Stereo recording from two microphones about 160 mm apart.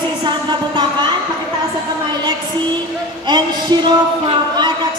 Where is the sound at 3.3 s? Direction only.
30° right (ahead or behind).